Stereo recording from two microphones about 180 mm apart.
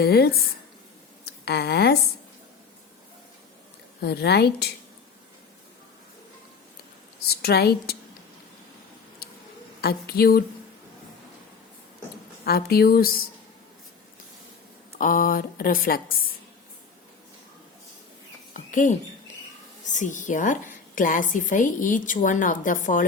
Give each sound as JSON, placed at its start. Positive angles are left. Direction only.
{"t": 0.0, "sound": "speech", "side_deg": 60}
{"t": 4.0, "sound": "speech", "side_deg": 65}
{"t": 7.3, "sound": "speech", "side_deg": 60}
{"t": 9.8, "sound": "speech", "side_deg": 60}
{"t": 12.5, "sound": "speech", "side_deg": 60}
{"t": 14.9, "sound": "a woman's voice", "side_deg": 50}
{"t": 18.5, "sound": "bird", "side_deg": 45}
{"t": 19.9, "sound": "a woman's voice", "side_deg": 45}